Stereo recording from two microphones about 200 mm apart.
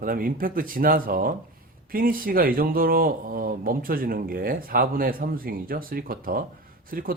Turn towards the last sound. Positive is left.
turn(degrees=-45)  # may be behind; listen again after turning